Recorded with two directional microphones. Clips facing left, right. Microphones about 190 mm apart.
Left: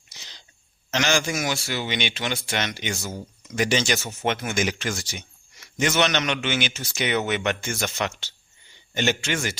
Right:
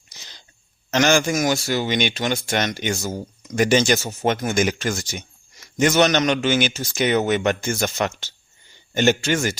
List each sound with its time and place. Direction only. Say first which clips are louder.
0.1 s throat clearing: right 2 dB; 45° right (ahead or behind)
0.9 s speech: right 6 dB; 50° right (ahead or behind)